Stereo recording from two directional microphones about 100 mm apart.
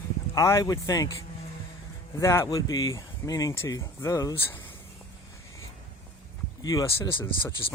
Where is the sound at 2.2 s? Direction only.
30° left (ahead or behind).